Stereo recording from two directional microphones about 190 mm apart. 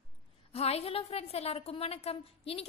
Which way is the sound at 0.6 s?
30° left (ahead or behind).